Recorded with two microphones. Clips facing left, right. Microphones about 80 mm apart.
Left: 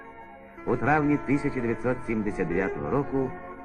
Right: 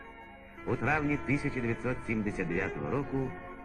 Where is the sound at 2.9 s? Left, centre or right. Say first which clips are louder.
Left 7 dB; left.